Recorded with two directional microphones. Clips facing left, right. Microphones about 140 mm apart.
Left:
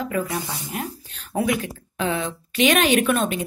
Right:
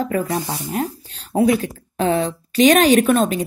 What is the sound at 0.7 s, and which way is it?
A woman's voice, 35° right (ahead or behind).